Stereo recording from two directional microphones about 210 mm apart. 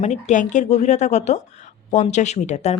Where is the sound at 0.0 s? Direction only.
35° left (ahead or behind).